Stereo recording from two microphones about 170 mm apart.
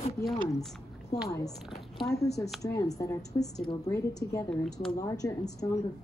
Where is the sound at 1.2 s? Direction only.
20° left (ahead or behind).